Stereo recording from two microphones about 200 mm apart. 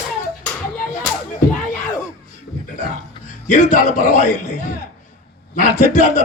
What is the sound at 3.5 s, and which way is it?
Speech, 40° left (ahead or behind).